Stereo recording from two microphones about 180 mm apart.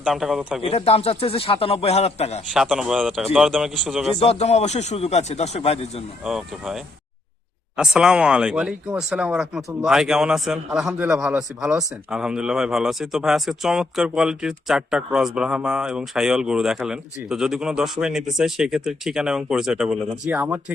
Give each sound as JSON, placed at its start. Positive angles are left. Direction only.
{"t": 0.0, "sound": "speech", "side_deg": 0}
{"t": 0.6, "sound": "speech", "side_deg": 35}
{"t": 2.5, "sound": "speech", "side_deg": -5}
{"t": 4.2, "sound": "speech", "side_deg": 35}
{"t": 6.2, "sound": "speech", "side_deg": 0}